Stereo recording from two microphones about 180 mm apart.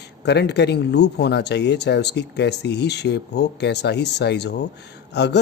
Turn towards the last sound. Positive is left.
turn(degrees=70)  # may be behind; listen again after turning